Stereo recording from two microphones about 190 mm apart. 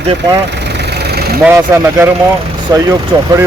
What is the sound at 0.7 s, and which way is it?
Vehicle, 60° right (ahead or behind).